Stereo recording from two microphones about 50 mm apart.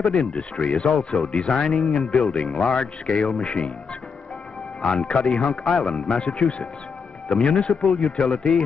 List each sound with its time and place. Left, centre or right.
0.1 s speech: centre
0.6 s speech: centre
0.8 s speech: centre
2.8 s speech: centre
4.8 s speech: centre